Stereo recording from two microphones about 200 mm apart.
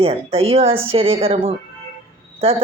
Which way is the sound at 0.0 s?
30° right (ahead or behind).